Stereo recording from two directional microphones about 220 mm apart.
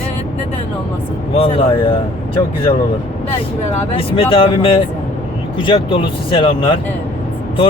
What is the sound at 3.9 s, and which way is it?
A man's voice, 25° left (ahead or behind).